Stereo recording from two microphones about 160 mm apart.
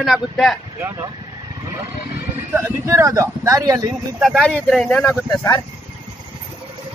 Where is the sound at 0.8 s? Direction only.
20° right (ahead or behind).